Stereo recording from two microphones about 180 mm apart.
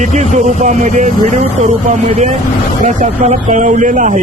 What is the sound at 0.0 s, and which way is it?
Speech, 40° right (ahead or behind).